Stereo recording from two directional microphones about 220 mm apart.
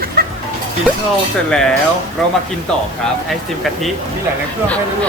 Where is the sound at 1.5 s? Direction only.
5° left (ahead or behind).